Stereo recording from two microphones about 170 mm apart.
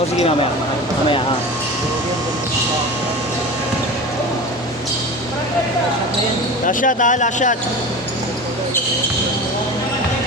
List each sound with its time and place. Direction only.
6.7 s speech: 50° left (ahead or behind)